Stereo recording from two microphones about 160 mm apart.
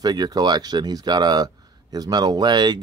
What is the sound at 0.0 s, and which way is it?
Speech, 25° right (ahead or behind).